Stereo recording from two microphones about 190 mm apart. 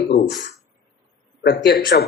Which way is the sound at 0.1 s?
55° left (ahead or behind).